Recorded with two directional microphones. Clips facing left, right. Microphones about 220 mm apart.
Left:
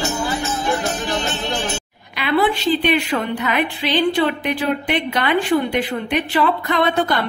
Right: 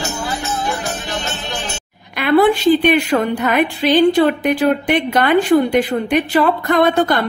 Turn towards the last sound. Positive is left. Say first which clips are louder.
# right 4 dB
turn(degrees=-45)  # may be behind; listen again after turning